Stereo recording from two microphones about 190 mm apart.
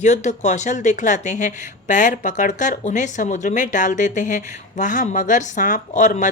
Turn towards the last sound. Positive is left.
turn(degrees=40)  # may be behind; listen again after turning